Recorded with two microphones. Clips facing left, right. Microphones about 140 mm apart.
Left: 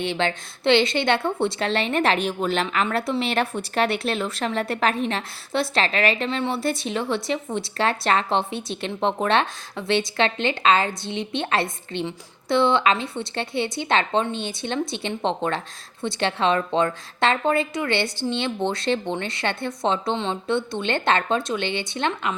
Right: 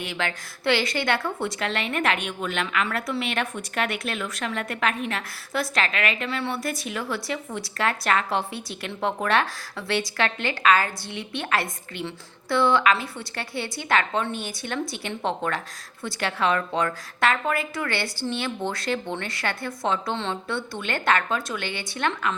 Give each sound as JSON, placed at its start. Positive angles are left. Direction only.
{"t": 0.0, "sound": "a woman's voice", "side_deg": 25}